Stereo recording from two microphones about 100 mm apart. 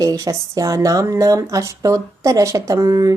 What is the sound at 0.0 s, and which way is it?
Speech, 35° right (ahead or behind).